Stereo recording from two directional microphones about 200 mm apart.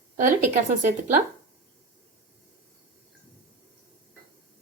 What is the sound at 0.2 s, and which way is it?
Speech, 40° right (ahead or behind).